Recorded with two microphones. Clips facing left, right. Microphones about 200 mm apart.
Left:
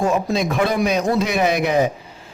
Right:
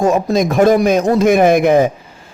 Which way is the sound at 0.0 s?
45° right (ahead or behind).